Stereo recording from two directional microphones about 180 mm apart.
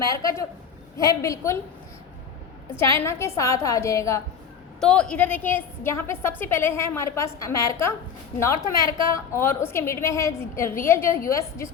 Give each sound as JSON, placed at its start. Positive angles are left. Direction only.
{"t": 0.0, "sound": "a woman's voice", "side_deg": 20}
{"t": 2.7, "sound": "a woman's voice", "side_deg": 15}
{"t": 4.8, "sound": "a woman's voice", "side_deg": 5}